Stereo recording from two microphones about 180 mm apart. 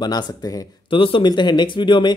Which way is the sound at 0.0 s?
25° left (ahead or behind).